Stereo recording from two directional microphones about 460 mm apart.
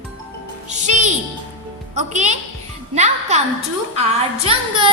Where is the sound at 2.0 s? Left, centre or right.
Centre.